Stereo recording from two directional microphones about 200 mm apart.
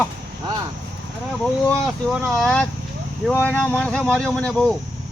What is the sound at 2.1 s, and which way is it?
Speech, centre (ahead or behind).